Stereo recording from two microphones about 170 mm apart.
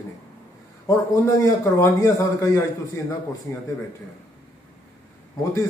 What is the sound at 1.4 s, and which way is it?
A man's voice, 20° left (ahead or behind).